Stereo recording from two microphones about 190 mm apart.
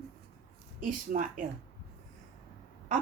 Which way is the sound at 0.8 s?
45° right (ahead or behind).